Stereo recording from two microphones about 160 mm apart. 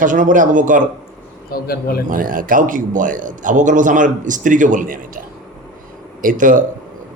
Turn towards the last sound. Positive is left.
turn(degrees=-55)  # may be behind; listen again after turning